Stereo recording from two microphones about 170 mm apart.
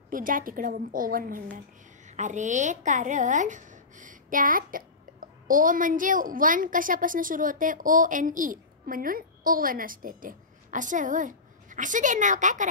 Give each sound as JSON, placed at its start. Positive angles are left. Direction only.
{"t": 0.1, "sound": "a woman's voice", "side_deg": -55}
{"t": 2.0, "sound": "a woman's voice", "side_deg": -45}